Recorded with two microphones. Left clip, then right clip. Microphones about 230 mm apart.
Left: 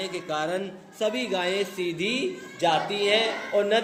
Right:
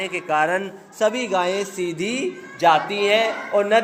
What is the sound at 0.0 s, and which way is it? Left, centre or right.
A man's voice, centre.